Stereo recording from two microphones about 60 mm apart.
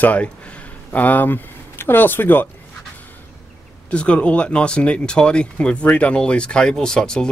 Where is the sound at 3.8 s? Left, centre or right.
Left.